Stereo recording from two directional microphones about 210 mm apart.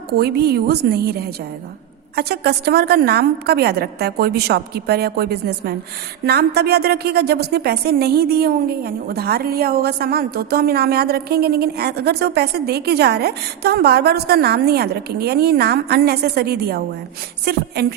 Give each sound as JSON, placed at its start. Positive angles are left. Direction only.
{"t": 0.2, "sound": "a woman's voice", "side_deg": -50}